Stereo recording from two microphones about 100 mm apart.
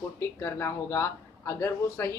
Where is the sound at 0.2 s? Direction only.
25° left (ahead or behind).